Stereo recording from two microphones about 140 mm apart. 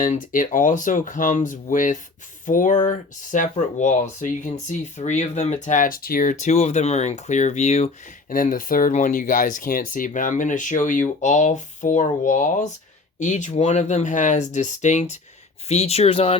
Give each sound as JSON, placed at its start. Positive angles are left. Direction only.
{"t": 0.0, "sound": "speech", "side_deg": 70}
{"t": 8.3, "sound": "speech", "side_deg": 70}